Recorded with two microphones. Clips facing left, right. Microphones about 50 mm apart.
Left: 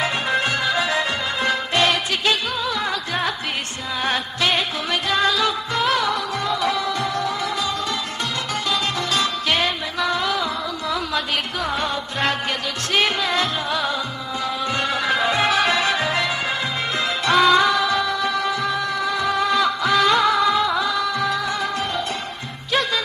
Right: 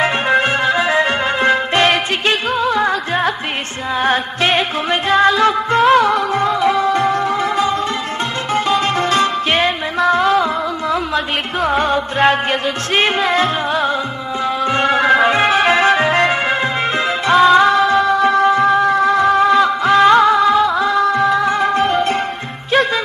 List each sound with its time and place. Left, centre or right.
0.0 s music: right